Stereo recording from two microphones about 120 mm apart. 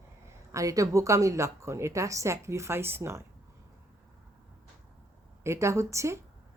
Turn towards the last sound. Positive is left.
turn(degrees=-25)  # may be behind; listen again after turning